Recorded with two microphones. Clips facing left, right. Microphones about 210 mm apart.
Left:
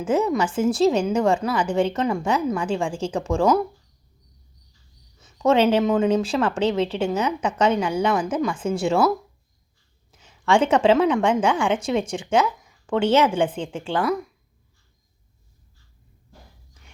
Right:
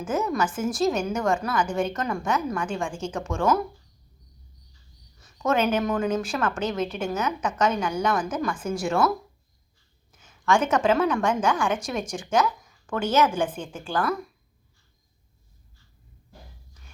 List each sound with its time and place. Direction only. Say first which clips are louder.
0.0 s a woman's voice: left 5 dB; 30° left (ahead or behind)
5.2 s a woman's voice: left 6 dB; 30° left (ahead or behind)
10.1 s a woman's voice: left 3 dB; 30° left (ahead or behind)